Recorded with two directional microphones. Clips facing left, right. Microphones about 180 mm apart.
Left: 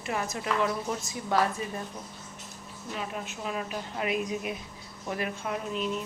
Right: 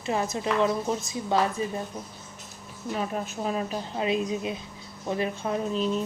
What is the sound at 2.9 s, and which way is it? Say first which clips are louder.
A woman's voice: right 6 dB; 40° right (ahead or behind).